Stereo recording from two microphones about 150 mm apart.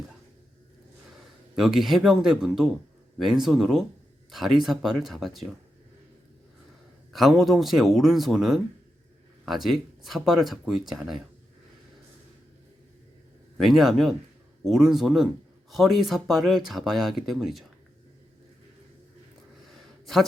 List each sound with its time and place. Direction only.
1.5 s speech: 5° right (ahead or behind)
7.1 s speech: centre (ahead or behind)
13.6 s speech: centre (ahead or behind)
19.6 s a sound: centre (ahead or behind)